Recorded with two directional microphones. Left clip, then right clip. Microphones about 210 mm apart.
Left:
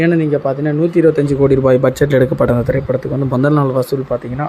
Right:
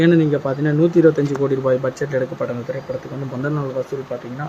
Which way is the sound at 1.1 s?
30° left (ahead or behind).